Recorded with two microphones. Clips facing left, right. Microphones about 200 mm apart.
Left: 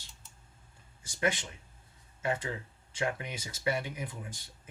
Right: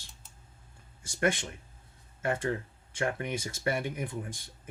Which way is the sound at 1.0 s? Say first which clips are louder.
Right 3 dB; 55° right (ahead or behind).